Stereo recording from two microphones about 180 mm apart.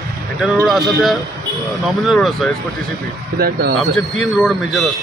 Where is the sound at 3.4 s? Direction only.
55° right (ahead or behind).